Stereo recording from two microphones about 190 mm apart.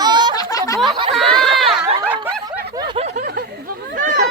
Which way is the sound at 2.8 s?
25° right (ahead or behind).